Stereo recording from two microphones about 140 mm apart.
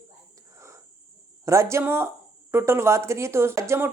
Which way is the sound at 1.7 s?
15° right (ahead or behind).